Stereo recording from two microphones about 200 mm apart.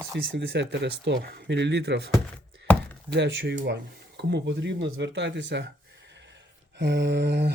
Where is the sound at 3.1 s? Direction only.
60° right (ahead or behind).